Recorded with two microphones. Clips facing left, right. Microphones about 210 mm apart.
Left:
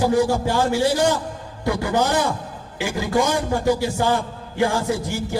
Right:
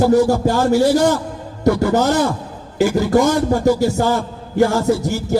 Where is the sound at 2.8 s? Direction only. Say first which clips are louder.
Right 7 dB; 45° right (ahead or behind).